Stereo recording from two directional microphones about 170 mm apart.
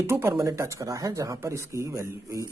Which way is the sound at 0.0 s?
15° right (ahead or behind).